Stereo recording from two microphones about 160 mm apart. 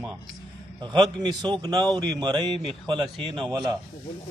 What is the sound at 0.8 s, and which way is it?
A man's voice, 25° right (ahead or behind).